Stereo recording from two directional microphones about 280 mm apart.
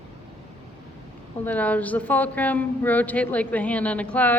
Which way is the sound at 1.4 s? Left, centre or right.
Centre.